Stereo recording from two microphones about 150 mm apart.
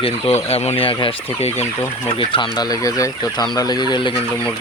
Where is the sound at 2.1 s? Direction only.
35° left (ahead or behind).